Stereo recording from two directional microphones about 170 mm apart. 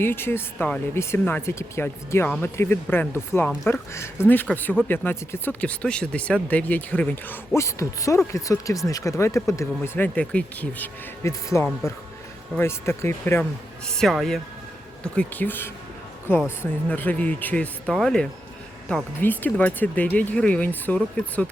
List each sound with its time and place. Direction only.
0.0 s speech: 15° left (ahead or behind)
13.4 s speech: 5° left (ahead or behind)
16.9 s speech: 10° left (ahead or behind)